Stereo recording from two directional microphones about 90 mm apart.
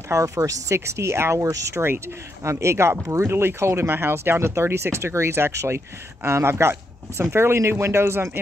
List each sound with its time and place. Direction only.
0.1 s speech: 35° right (ahead or behind)